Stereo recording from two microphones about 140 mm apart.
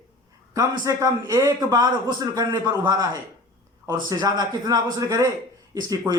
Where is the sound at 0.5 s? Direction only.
25° right (ahead or behind).